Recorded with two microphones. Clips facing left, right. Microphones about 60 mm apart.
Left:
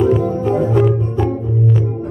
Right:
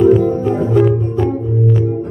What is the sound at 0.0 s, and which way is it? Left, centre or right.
Music, centre.